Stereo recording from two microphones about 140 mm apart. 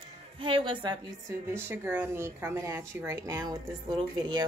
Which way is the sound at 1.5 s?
15° right (ahead or behind).